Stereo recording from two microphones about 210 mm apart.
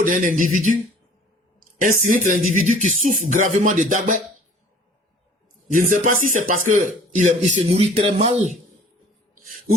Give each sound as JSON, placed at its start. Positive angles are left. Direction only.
{"t": 0.0, "sound": "speech", "side_deg": -40}
{"t": 1.8, "sound": "speech", "side_deg": -40}
{"t": 5.7, "sound": "speech", "side_deg": -40}